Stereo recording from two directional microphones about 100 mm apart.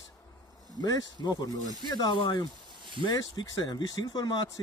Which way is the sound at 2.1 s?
50° left (ahead or behind).